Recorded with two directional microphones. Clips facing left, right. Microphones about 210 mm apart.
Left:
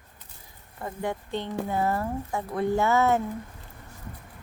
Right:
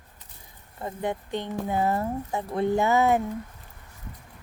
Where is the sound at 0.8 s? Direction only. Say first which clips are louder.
Right 1 dB; 20° right (ahead or behind).